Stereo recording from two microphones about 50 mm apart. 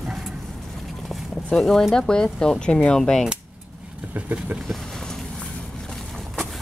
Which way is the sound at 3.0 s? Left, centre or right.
Centre.